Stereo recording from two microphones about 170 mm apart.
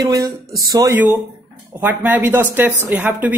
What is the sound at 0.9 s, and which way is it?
A woman's voice, 10° right (ahead or behind).